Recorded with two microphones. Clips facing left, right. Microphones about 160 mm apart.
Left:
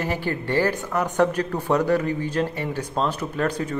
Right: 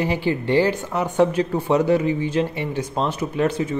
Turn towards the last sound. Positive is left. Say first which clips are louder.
# right 4 dB
turn(degrees=-10)  # may be behind; listen again after turning